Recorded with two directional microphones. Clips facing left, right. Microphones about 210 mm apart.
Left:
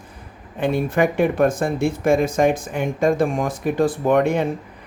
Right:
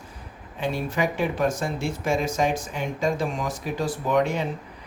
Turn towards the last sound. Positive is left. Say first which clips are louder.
# left 6 dB
turn(degrees=55)  # may be behind; listen again after turning